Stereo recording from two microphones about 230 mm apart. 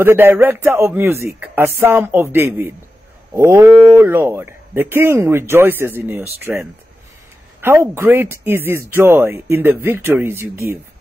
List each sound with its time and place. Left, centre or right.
0.0 s speech: centre